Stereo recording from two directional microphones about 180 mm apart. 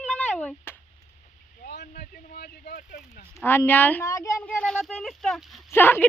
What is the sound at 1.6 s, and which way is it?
Speech, 65° left (ahead or behind).